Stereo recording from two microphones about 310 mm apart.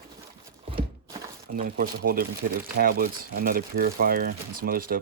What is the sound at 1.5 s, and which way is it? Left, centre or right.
Speech, right.